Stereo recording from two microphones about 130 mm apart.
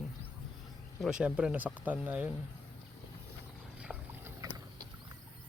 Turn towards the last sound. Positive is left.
turn(degrees=-25)  # may be behind; listen again after turning